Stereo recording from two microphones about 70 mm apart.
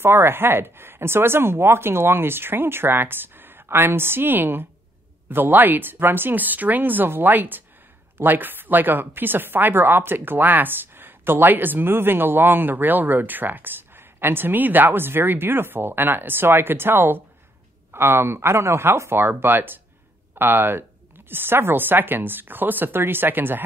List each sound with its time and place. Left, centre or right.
0.0 s speech: right